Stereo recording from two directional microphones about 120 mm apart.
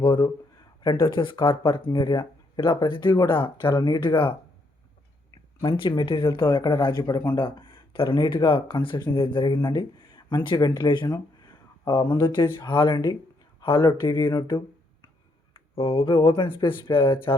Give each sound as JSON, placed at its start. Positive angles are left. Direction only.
{"t": 0.0, "sound": "speech", "side_deg": 45}
{"t": 5.6, "sound": "speech", "side_deg": 45}
{"t": 15.5, "sound": "a sound", "side_deg": 50}
{"t": 16.0, "sound": "speech", "side_deg": 45}